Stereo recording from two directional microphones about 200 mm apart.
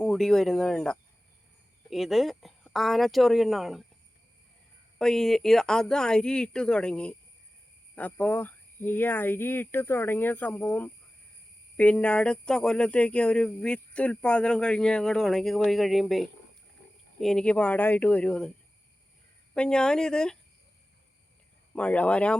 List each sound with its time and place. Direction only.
0.0 s speech: centre (ahead or behind)
4.9 s speech: centre (ahead or behind)
19.5 s speech: 5° left (ahead or behind)
21.8 s speech: 5° left (ahead or behind)